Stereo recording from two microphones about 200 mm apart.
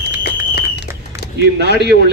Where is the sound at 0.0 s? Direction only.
55° left (ahead or behind).